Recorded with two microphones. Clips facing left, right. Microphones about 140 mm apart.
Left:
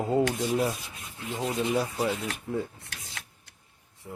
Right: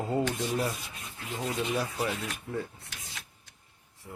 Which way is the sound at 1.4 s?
20° left (ahead or behind).